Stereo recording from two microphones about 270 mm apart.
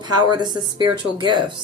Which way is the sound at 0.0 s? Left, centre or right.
Centre.